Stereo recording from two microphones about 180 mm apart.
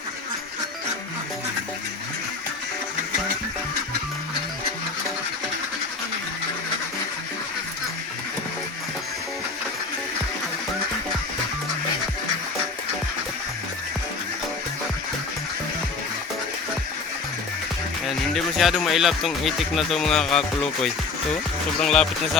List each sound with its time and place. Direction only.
18.0 s speech: centre (ahead or behind)